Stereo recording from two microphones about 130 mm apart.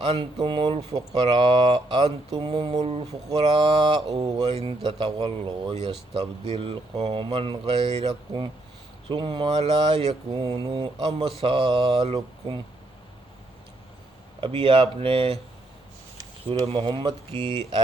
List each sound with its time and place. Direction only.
0.0 s speech: 35° right (ahead or behind)
3.4 s speech: 40° right (ahead or behind)
6.5 s speech: 45° right (ahead or behind)
14.4 s speech: 40° right (ahead or behind)
16.5 s speech: 45° right (ahead or behind)
17.3 s speech: 20° left (ahead or behind)